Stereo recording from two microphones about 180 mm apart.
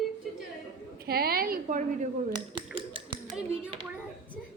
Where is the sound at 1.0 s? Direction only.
60° right (ahead or behind).